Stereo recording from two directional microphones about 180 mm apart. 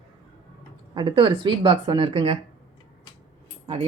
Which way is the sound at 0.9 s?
30° right (ahead or behind).